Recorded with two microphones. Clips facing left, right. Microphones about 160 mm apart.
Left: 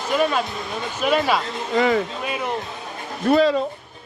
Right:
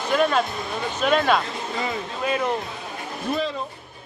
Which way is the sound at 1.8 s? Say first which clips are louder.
Left 11 dB; 75° left (ahead or behind).